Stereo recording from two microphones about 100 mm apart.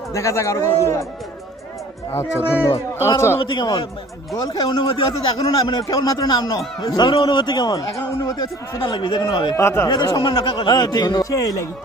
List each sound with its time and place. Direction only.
0.1 s a man's voice: 30° left (ahead or behind)
2.1 s speech: 25° left (ahead or behind)
3.4 s a man's voice: 45° left (ahead or behind)
5.9 s a man's voice: 40° left (ahead or behind)
8.8 s a man's voice: 55° left (ahead or behind)
9.6 s speech: 30° left (ahead or behind)
9.9 s a man's voice: 50° left (ahead or behind)
10.8 s a man's voice: 45° left (ahead or behind)